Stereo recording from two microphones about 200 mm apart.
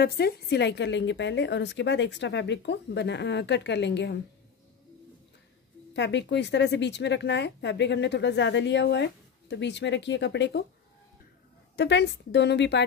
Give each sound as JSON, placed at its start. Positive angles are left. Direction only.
{"t": 0.0, "sound": "a woman's voice", "side_deg": 55}
{"t": 5.9, "sound": "a woman's voice", "side_deg": 60}
{"t": 11.7, "sound": "a woman's voice", "side_deg": 60}